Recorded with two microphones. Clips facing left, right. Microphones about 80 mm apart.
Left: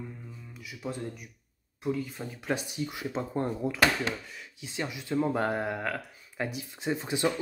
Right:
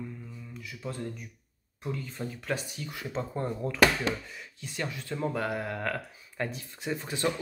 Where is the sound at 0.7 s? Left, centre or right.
Centre.